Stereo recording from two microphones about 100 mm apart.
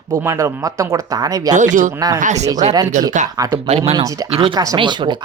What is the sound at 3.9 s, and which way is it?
Speech, 35° right (ahead or behind).